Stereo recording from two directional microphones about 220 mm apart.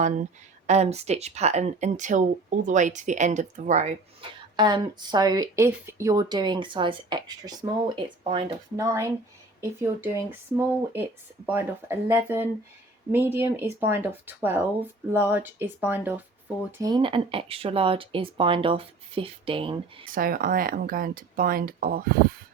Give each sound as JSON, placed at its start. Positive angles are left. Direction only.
{"t": 0.7, "sound": "speech", "side_deg": -30}
{"t": 4.5, "sound": "speech", "side_deg": -20}
{"t": 11.4, "sound": "speech", "side_deg": -10}
{"t": 20.1, "sound": "speech", "side_deg": -40}